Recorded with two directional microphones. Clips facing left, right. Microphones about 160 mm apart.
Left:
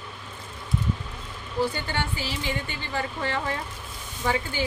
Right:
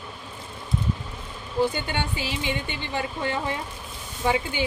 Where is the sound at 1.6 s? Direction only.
20° right (ahead or behind).